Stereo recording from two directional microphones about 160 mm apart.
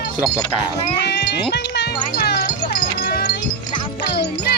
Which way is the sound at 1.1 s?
90° left.